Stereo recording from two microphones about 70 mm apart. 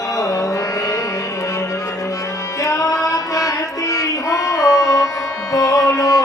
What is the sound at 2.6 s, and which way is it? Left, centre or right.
Music, left.